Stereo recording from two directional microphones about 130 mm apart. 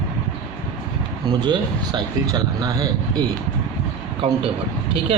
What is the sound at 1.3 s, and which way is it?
A man's voice, 35° right (ahead or behind).